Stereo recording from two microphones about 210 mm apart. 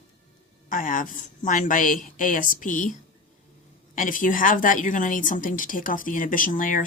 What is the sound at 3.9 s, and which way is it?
A woman's voice, 40° left (ahead or behind).